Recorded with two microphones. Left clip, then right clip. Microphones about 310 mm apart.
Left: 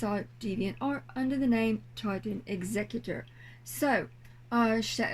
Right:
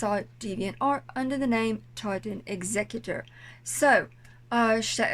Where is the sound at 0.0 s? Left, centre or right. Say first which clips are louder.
Right 5 dB; right.